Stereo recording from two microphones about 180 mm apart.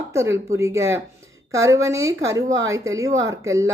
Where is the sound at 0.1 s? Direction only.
15° right (ahead or behind).